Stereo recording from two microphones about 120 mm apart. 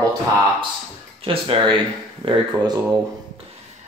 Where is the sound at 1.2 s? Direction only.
50° right (ahead or behind).